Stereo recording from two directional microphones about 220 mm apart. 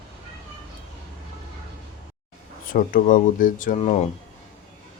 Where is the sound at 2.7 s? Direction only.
40° left (ahead or behind).